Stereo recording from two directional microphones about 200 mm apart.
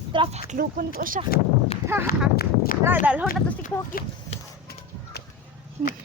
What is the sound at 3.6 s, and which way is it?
Horse, 45° left (ahead or behind).